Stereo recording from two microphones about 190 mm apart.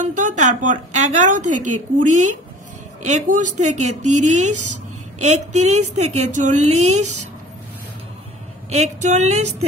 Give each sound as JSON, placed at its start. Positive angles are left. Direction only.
{"t": 0.0, "sound": "a woman's voice", "side_deg": -40}
{"t": 8.6, "sound": "a woman's voice", "side_deg": -35}